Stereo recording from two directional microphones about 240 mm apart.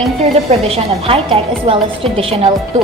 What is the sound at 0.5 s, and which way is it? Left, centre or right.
A woman's voice, right.